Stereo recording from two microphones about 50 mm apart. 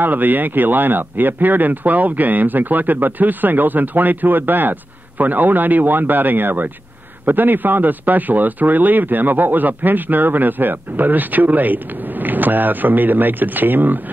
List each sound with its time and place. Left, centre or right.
0.0 s a man's voice: right